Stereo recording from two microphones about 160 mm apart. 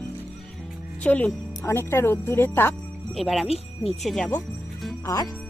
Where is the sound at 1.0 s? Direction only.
10° left (ahead or behind).